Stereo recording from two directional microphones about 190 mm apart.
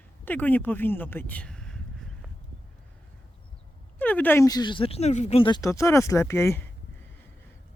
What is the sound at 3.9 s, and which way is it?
Speech, 10° left (ahead or behind).